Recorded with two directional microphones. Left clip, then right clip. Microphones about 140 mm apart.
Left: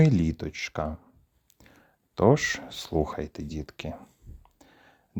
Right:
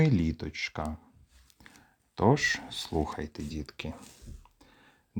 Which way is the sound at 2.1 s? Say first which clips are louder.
Left 3 dB; 50° left (ahead or behind).